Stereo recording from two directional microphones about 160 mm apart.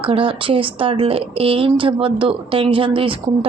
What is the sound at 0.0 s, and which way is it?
A woman's voice, 35° right (ahead or behind).